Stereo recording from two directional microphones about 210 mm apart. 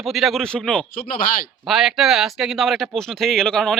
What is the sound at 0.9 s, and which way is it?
Speech, 40° left (ahead or behind).